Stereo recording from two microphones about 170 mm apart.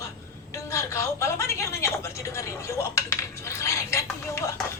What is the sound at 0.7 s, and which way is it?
Speech, 15° left (ahead or behind).